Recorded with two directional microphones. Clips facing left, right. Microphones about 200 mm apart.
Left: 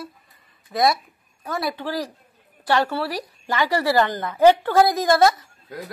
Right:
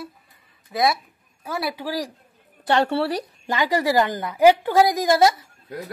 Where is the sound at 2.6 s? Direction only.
25° right (ahead or behind).